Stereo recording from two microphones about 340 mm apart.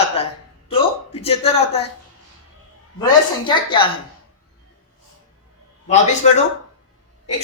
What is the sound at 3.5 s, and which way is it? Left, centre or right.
Speech, centre.